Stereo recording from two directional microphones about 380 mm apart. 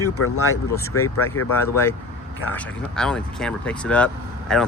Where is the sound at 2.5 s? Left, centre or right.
Centre.